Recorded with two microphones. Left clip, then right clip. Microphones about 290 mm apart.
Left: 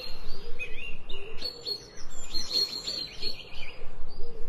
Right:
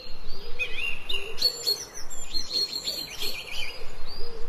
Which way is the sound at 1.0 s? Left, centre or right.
Right.